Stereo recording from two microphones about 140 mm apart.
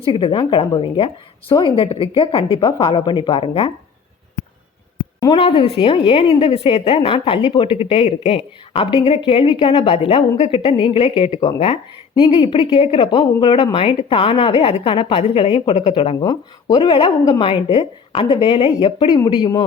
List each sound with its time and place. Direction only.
0.0 s speech: 40° left (ahead or behind)
5.2 s speech: 35° left (ahead or behind)